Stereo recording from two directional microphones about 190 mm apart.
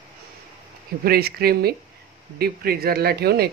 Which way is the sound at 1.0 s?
55° right (ahead or behind).